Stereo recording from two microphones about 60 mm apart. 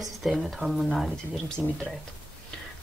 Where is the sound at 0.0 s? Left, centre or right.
Centre.